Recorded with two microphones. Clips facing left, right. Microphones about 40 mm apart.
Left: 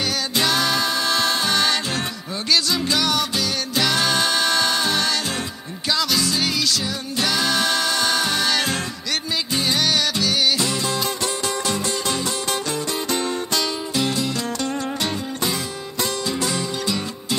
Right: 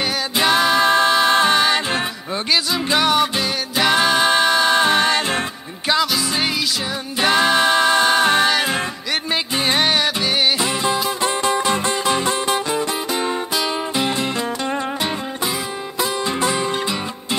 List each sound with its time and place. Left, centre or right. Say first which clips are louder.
0.0 s music: right 3 dB; right
0.8 s music: right 7 dB; right
8.5 s music: right 3 dB; centre
9.3 s music: right 3 dB; right